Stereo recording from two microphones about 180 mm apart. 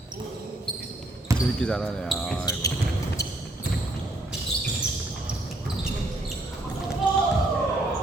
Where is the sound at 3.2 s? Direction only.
65° left (ahead or behind).